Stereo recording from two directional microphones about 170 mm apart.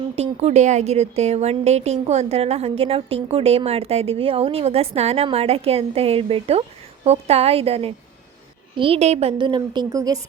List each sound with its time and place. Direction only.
0.2 s a woman's voice: 40° right (ahead or behind)
9.6 s speech: 20° right (ahead or behind)